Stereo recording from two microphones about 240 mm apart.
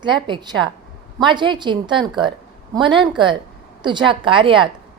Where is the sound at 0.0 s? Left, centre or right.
Centre.